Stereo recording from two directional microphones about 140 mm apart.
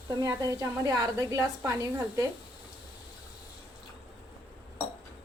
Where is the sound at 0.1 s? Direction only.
25° right (ahead or behind).